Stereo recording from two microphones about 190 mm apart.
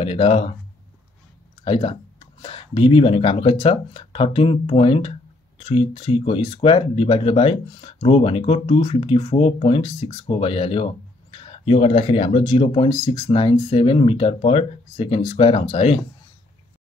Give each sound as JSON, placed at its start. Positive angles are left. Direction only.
{"t": 0.0, "sound": "speech", "side_deg": 30}
{"t": 1.6, "sound": "speech", "side_deg": 25}